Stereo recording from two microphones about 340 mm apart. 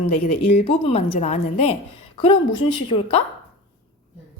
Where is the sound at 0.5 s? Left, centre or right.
Centre.